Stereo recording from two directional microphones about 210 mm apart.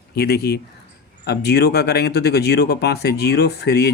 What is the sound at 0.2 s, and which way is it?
Speech, 50° left (ahead or behind).